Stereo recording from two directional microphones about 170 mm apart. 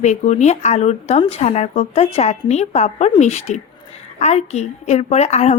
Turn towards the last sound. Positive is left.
turn(degrees=40)  # may be behind; listen again after turning